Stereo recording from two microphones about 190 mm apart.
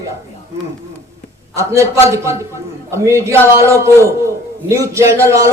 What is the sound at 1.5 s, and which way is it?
A man's voice, 15° right (ahead or behind).